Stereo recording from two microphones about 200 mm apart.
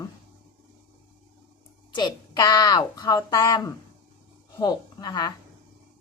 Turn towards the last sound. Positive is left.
turn(degrees=20)  # may be behind; listen again after turning